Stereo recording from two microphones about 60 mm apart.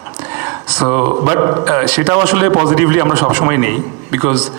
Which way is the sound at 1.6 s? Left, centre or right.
Centre.